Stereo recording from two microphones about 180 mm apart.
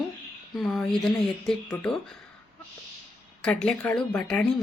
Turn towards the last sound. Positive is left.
turn(degrees=5)  # may be behind; listen again after turning